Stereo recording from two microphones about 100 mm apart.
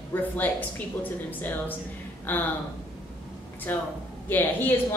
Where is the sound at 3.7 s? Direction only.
15° left (ahead or behind).